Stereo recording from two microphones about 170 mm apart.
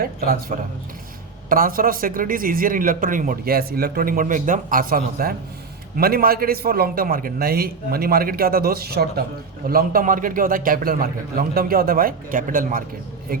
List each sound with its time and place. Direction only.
0.0 s a man's voice: 55° right (ahead or behind)